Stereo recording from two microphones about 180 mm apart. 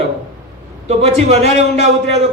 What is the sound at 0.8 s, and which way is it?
A man's voice, 35° right (ahead or behind).